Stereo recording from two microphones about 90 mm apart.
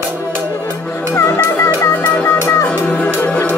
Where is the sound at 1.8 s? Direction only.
25° left (ahead or behind).